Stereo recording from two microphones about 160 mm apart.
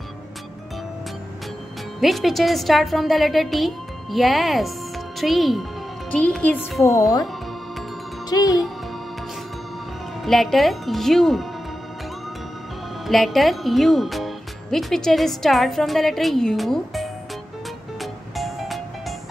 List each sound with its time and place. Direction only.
2.0 s speech: centre (ahead or behind)
6.8 s a woman's voice: 20° left (ahead or behind)
8.3 s speech: 20° left (ahead or behind)
10.2 s speech: centre (ahead or behind)
13.0 s speech: centre (ahead or behind)
18.3 s music: centre (ahead or behind)